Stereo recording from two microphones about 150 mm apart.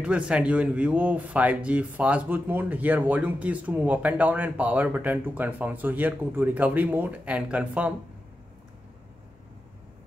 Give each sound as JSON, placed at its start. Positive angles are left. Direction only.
{"t": 0.0, "sound": "speech", "side_deg": -5}